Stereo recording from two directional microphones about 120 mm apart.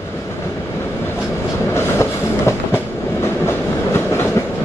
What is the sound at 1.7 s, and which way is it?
Train, 20° left (ahead or behind).